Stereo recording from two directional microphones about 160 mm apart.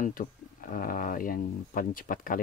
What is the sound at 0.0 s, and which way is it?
Speech, 55° left (ahead or behind).